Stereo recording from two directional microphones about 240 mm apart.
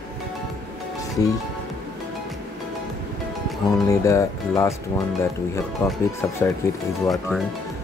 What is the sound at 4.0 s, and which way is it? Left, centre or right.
Speech, centre.